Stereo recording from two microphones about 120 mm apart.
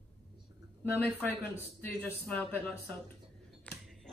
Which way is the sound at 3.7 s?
15° left (ahead or behind).